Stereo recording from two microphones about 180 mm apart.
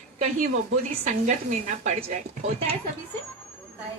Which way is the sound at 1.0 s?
45° right (ahead or behind).